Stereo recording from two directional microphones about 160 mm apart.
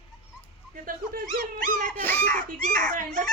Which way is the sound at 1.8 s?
10° left (ahead or behind).